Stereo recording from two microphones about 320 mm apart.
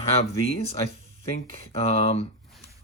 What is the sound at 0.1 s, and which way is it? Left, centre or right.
Speech, centre.